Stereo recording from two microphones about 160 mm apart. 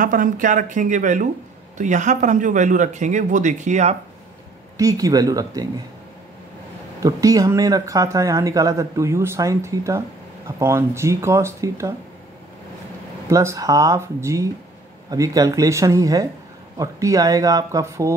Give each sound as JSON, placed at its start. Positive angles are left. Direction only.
{"t": 0.0, "sound": "speech", "side_deg": -55}
{"t": 4.7, "sound": "speech", "side_deg": -20}
{"t": 7.0, "sound": "speech", "side_deg": -20}
{"t": 13.3, "sound": "speech", "side_deg": -20}